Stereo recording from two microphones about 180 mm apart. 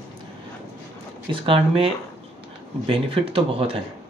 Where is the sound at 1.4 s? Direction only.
30° right (ahead or behind).